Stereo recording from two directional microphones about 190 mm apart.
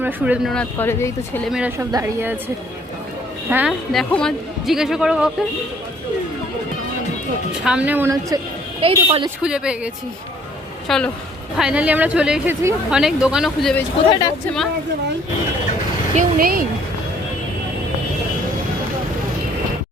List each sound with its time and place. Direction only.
0.0 s a woman's voice: 10° right (ahead or behind)
0.5 s speech: 10° left (ahead or behind)
1.5 s speech: 5° right (ahead or behind)
1.8 s a woman's voice: 15° right (ahead or behind)
3.5 s speech: 5° right (ahead or behind)
7.6 s a woman's voice: 5° right (ahead or behind)
8.8 s speech: 30° right (ahead or behind)
9.4 s a woman's voice: 5° right (ahead or behind)
14.1 s a woman's voice: 20° left (ahead or behind)
16.1 s speech: 50° right (ahead or behind)